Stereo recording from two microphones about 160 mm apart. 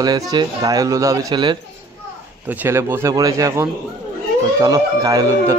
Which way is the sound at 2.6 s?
15° right (ahead or behind).